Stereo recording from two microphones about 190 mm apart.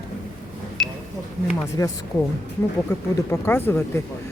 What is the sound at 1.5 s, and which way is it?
Speech, 15° left (ahead or behind).